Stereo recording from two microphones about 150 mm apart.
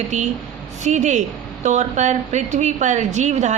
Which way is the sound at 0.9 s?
55° right (ahead or behind).